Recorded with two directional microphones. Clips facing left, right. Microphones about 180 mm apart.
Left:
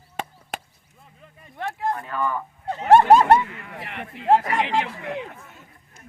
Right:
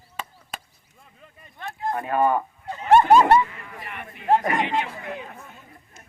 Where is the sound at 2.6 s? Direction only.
70° left (ahead or behind).